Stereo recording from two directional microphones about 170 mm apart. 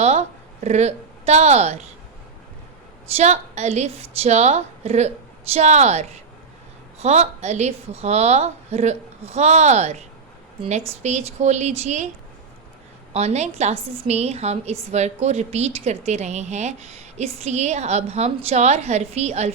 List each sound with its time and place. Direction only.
0.0 s a sound: 40° right (ahead or behind)
3.2 s a woman's voice: 40° right (ahead or behind)
13.1 s a woman's voice: 40° right (ahead or behind)